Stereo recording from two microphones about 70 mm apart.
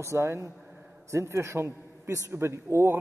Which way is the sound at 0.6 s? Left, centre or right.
Right.